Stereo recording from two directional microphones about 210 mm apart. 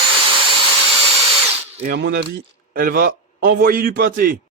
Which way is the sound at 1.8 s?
50° right (ahead or behind).